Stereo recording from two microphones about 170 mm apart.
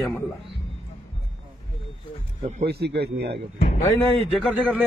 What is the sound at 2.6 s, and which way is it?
Speech, 75° right (ahead or behind).